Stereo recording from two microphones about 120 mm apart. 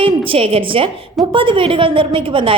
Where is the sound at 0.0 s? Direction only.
50° right (ahead or behind).